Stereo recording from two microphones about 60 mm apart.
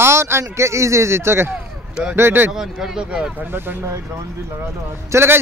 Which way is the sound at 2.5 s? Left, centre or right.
Centre.